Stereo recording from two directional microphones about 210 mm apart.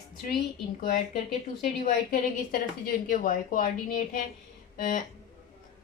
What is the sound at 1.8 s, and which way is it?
Speech, 45° left (ahead or behind).